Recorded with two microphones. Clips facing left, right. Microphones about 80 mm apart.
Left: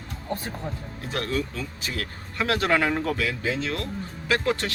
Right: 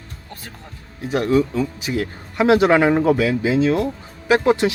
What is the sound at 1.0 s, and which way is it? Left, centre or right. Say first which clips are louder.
Speech: right 11 dB; centre.